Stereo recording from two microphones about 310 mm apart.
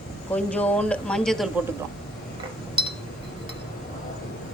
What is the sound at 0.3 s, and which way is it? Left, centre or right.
A woman's voice, centre.